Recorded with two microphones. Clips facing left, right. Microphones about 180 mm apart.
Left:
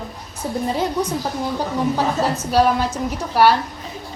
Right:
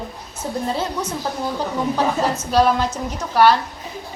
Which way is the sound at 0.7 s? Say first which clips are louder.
Left 3 dB; 15° left (ahead or behind).